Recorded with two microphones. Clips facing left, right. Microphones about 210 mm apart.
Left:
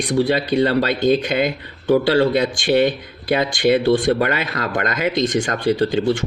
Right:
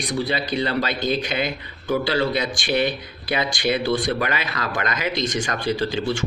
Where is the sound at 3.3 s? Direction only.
55° left (ahead or behind).